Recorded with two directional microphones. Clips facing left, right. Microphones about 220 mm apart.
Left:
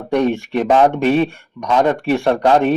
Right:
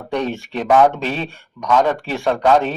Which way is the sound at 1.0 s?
60° left (ahead or behind).